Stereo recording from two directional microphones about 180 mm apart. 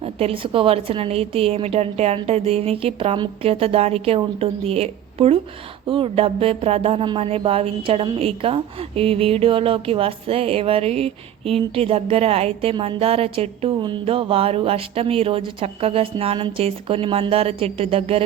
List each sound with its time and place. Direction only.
0.0 s music: 35° right (ahead or behind)